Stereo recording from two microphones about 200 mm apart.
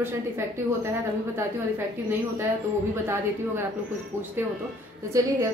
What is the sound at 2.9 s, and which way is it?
A woman's voice, 15° right (ahead or behind).